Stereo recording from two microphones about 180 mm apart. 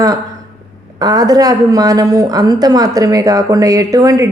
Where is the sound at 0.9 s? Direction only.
20° right (ahead or behind).